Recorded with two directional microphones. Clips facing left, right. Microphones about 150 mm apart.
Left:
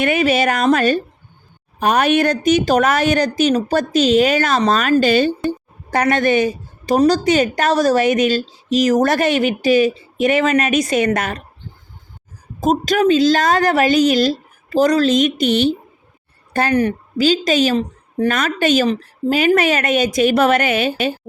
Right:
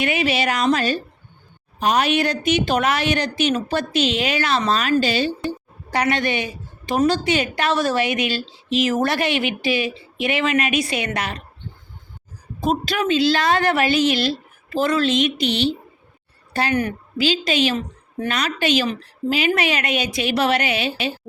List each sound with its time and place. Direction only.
0.0 s a woman's voice: 50° left (ahead or behind)
12.5 s a woman's voice: 40° left (ahead or behind)
16.5 s a sound: 45° left (ahead or behind)
16.7 s a woman's voice: 35° left (ahead or behind)